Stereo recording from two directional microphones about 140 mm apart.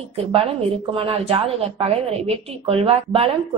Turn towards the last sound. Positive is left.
turn(degrees=-45)  # may be behind; listen again after turning